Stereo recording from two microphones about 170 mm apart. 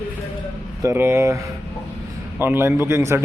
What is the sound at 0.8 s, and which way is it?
Speech, 15° right (ahead or behind).